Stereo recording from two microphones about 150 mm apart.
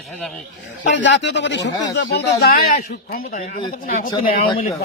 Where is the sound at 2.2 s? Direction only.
90° left.